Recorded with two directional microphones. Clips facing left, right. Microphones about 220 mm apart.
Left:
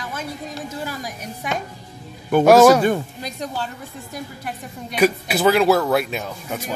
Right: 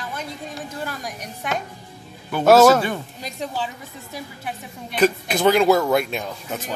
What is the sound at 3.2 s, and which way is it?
Speech, centre (ahead or behind).